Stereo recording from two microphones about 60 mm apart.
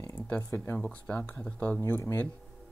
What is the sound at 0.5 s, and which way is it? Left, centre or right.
Speech, left.